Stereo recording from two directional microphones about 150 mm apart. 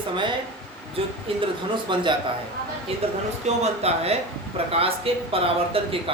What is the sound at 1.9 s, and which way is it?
Speech, 35° right (ahead or behind).